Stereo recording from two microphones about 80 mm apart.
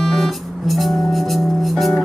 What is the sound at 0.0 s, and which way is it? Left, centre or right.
Music, centre.